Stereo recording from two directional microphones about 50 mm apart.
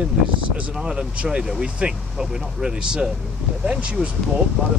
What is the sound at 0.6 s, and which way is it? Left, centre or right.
Speech, centre.